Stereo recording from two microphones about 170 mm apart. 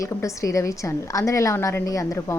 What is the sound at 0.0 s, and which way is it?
A woman's voice, 20° left (ahead or behind).